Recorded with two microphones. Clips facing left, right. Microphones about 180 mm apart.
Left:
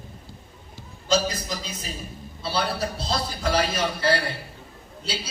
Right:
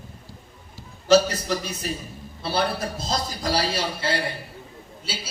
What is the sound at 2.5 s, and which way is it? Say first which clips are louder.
A man's voice: right 2 dB; 50° right (ahead or behind).